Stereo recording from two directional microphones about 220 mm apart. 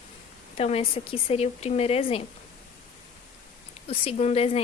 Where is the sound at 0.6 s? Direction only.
25° left (ahead or behind).